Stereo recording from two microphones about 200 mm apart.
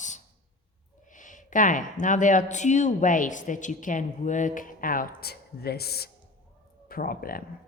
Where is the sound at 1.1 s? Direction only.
40° left (ahead or behind).